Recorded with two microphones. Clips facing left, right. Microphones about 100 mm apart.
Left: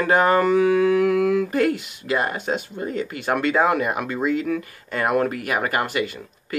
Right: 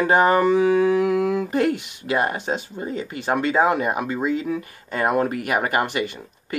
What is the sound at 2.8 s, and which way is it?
Speech, 25° right (ahead or behind).